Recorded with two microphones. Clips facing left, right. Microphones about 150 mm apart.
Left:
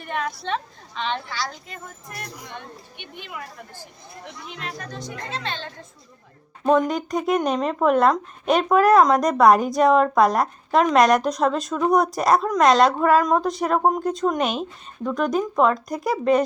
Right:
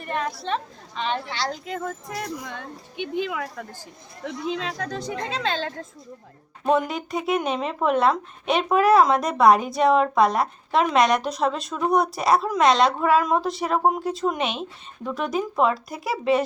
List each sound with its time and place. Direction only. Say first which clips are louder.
0.0 s a woman's voice: even; centre (ahead or behind)
1.3 s speech: right 2 dB; 30° right (ahead or behind)
1.7 s speech: right 9 dB; 85° right
3.2 s speech: right 6 dB; 90° right
6.7 s a woman's voice: left 3 dB; 5° right (ahead or behind)